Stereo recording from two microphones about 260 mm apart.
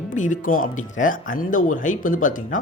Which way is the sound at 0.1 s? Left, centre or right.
Left.